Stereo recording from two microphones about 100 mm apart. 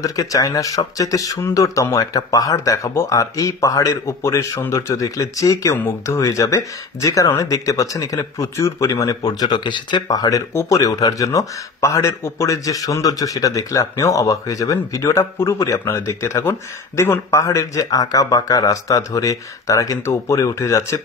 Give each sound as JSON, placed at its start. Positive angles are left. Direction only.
{"t": 0.0, "sound": "speech", "side_deg": 35}